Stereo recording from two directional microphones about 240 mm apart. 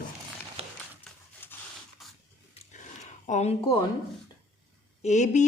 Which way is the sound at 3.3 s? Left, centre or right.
Left.